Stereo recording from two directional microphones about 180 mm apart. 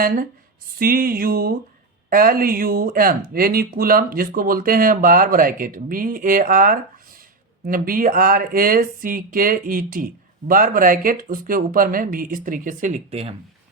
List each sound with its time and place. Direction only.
0.8 s speech: 55° right (ahead or behind); by 13.3 s 35° right (ahead or behind)